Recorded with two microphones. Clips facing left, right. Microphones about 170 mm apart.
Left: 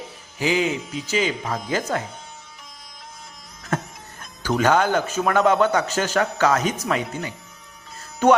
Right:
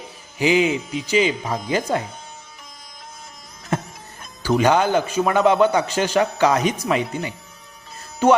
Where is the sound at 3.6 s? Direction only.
10° right (ahead or behind).